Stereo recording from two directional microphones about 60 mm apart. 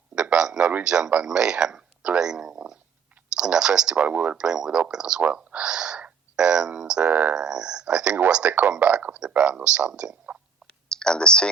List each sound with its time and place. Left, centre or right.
0.2 s a sound: centre
0.9 s a man's voice: centre
4.0 s speech: right
4.4 s a man's voice: centre
5.2 s speech: right
7.1 s speech: right
7.3 s a man's voice: centre
10.3 s a sound: right
10.8 s a sound: centre